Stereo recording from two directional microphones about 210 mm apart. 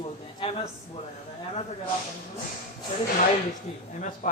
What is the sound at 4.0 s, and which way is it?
Speech, 40° left (ahead or behind).